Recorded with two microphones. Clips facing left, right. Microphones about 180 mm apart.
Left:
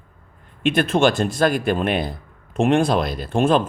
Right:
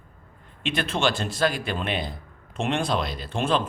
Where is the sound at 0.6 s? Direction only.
50° left (ahead or behind).